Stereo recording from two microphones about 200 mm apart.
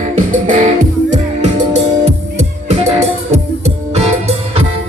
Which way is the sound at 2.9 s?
30° right (ahead or behind).